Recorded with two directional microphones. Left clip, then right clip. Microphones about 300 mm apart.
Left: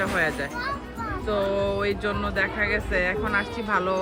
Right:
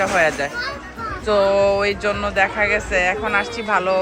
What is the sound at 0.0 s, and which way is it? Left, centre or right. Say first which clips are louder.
A man's voice: right 7 dB; centre.